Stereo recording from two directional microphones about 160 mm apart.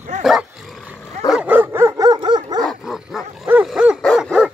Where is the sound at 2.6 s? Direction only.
Centre (ahead or behind).